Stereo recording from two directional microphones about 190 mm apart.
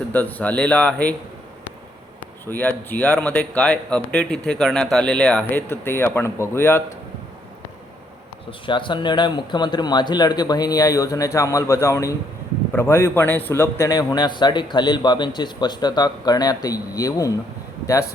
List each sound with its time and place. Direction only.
0.1 s speech: 10° left (ahead or behind)
2.5 s speech: 10° left (ahead or behind)
8.4 s a man's voice: 25° left (ahead or behind)